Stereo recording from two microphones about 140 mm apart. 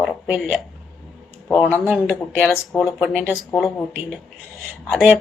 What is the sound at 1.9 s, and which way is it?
Speech, centre (ahead or behind).